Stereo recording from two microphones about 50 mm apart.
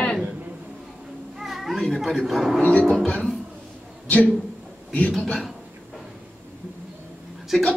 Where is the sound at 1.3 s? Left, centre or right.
Centre.